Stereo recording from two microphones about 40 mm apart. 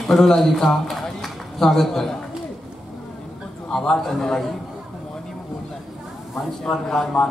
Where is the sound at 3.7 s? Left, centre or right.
Centre.